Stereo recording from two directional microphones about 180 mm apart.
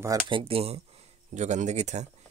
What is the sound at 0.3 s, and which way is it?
Speech, 30° right (ahead or behind).